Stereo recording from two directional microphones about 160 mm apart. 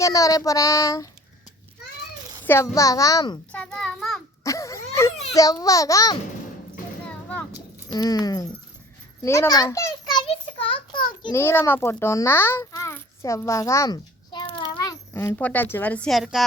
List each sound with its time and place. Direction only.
0.0 s child singing: 20° left (ahead or behind)
2.4 s child singing: 15° left (ahead or behind)
3.5 s a child's voice: 5° left (ahead or behind)
4.4 s a sound: 20° left (ahead or behind)
5.3 s child singing: 20° left (ahead or behind)
7.9 s child singing: 25° left (ahead or behind)
9.2 s a child's voice: 20° left (ahead or behind)
11.3 s a child's voice: 15° left (ahead or behind)
15.1 s speech: 15° left (ahead or behind); by 16.5 s centre (ahead or behind)